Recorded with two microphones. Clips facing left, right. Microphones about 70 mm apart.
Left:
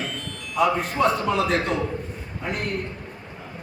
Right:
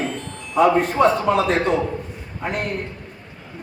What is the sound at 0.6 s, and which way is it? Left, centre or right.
A man's voice, right.